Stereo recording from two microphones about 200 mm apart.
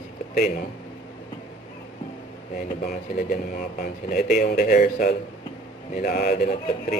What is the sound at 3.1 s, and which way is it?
Speech, 45° left (ahead or behind).